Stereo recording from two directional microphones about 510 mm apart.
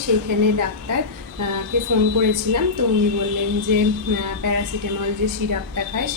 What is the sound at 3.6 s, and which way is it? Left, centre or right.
A woman's voice, right.